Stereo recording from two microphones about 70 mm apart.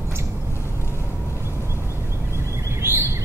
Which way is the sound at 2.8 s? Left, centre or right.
Right.